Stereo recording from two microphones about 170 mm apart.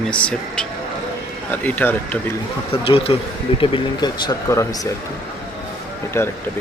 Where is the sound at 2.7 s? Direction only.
35° left (ahead or behind).